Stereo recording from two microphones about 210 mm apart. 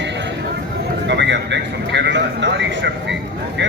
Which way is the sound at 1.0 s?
55° right (ahead or behind).